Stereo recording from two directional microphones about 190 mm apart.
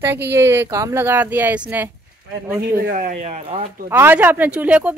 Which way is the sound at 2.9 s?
45° right (ahead or behind).